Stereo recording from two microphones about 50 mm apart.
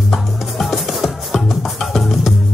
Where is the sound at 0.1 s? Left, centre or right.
Centre.